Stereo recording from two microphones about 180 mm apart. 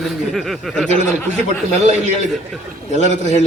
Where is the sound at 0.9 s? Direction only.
40° right (ahead or behind).